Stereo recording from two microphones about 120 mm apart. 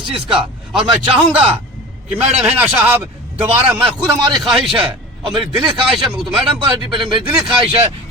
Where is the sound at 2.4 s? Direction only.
10° right (ahead or behind).